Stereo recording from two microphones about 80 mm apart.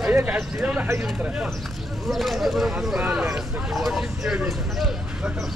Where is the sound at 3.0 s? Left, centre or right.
Centre.